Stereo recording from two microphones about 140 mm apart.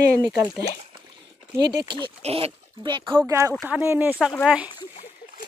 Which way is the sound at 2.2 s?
45° right (ahead or behind).